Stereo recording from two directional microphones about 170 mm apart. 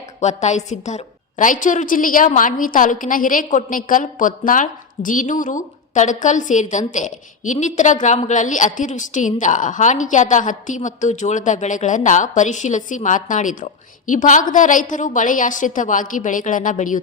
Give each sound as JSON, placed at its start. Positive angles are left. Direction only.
{"t": 0.2, "sound": "a woman's voice", "side_deg": 45}